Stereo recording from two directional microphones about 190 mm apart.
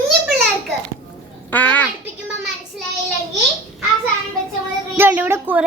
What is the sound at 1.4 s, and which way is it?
Speech, 10° left (ahead or behind).